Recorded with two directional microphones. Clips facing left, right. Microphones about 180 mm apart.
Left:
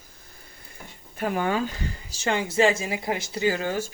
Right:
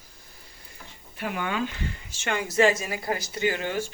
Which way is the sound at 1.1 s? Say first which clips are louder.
Left 4 dB; 40° left (ahead or behind).